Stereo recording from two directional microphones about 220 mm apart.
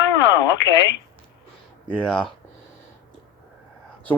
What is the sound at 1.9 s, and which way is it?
Speech, 5° left (ahead or behind).